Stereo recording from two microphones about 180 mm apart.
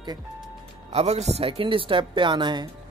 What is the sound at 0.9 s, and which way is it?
Speech, 35° right (ahead or behind).